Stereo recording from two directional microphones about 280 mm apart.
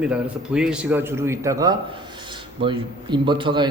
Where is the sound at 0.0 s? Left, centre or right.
Centre.